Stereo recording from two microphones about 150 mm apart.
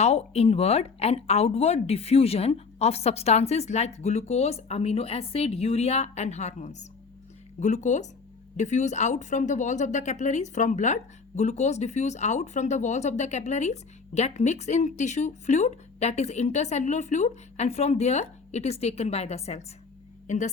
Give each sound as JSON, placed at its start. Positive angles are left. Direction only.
{"t": 0.0, "sound": "speech", "side_deg": 45}